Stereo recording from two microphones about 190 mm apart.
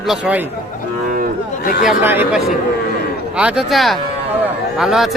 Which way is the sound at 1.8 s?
10° right (ahead or behind).